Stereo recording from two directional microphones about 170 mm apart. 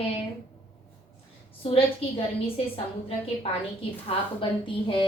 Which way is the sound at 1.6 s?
35° left (ahead or behind).